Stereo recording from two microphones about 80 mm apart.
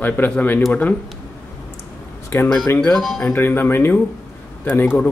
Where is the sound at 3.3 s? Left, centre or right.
Left.